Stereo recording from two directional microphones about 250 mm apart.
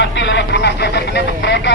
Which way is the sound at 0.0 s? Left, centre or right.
Left.